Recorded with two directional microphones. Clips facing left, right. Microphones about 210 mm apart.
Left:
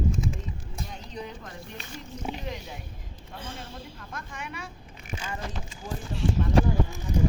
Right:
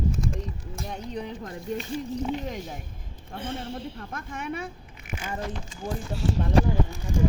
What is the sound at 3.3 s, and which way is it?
A woman's voice, 60° right (ahead or behind).